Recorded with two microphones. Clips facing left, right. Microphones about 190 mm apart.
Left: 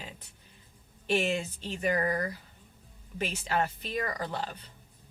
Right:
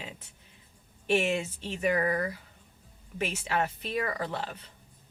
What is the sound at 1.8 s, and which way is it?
Speech, 35° left (ahead or behind).